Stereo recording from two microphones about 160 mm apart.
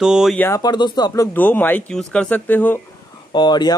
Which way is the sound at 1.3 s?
10° left (ahead or behind).